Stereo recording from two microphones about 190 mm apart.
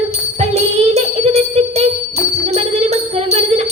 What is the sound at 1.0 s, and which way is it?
Jingle bell, 35° right (ahead or behind).